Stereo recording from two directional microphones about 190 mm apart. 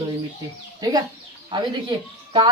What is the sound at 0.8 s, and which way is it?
Speech, 20° right (ahead or behind).